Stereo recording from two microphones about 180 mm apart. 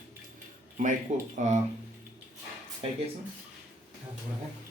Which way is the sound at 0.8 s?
45° right (ahead or behind).